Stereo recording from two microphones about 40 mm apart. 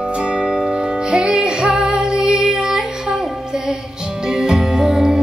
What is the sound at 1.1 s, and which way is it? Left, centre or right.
Music, centre.